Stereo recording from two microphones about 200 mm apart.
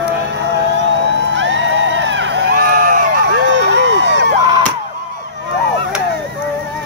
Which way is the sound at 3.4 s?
65° right (ahead or behind).